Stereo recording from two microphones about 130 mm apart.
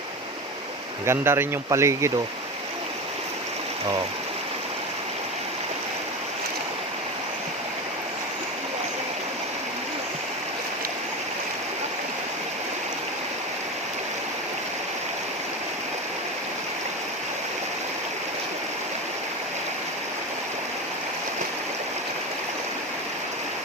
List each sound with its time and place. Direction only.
1.0 s speech: 20° right (ahead or behind)